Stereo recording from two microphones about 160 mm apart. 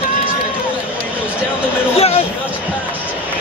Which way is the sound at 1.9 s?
40° left (ahead or behind).